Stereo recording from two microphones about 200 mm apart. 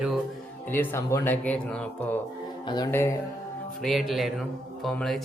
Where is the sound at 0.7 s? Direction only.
10° left (ahead or behind).